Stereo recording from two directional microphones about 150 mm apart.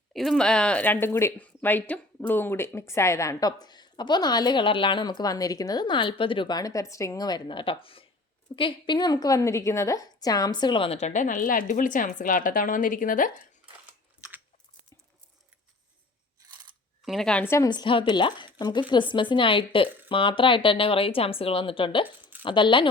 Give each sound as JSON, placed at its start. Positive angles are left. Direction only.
{"t": 0.1, "sound": "a woman's voice", "side_deg": 0}
{"t": 17.1, "sound": "a woman's voice", "side_deg": 5}
{"t": 17.7, "sound": "speech", "side_deg": 35}
{"t": 22.0, "sound": "a sound", "side_deg": -10}
{"t": 22.4, "sound": "speech", "side_deg": 35}